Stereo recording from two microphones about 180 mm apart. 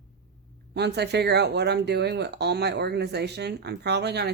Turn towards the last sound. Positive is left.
turn(degrees=-70)  # may be behind; listen again after turning